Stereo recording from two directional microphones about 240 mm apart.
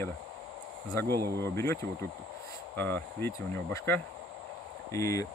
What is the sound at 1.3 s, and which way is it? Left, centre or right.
Speech, centre.